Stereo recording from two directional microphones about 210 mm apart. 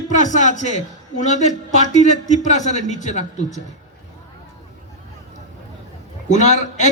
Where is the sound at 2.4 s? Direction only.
35° left (ahead or behind).